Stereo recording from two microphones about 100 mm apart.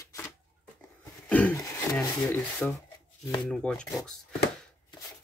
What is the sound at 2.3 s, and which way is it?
Speech, 15° left (ahead or behind).